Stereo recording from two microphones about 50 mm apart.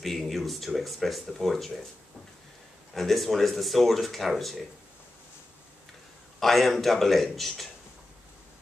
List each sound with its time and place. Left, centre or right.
0.0 s speech: centre
2.9 s speech: centre
6.4 s speech: centre